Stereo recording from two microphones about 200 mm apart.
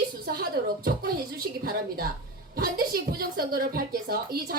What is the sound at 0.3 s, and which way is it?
Speech, 50° right (ahead or behind).